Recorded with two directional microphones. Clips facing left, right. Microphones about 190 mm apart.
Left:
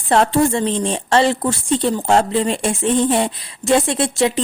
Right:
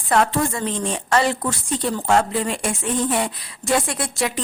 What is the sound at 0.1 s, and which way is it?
A woman's voice, 30° left (ahead or behind).